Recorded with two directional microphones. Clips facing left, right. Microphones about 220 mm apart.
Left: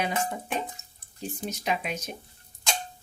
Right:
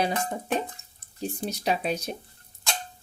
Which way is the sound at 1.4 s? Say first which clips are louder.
Right 3 dB; 35° right (ahead or behind).